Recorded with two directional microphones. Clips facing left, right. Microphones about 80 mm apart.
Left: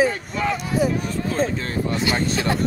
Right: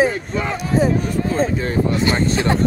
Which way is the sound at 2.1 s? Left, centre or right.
Right.